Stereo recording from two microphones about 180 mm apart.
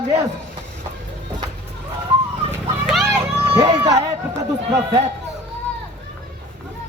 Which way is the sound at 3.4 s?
10° right (ahead or behind).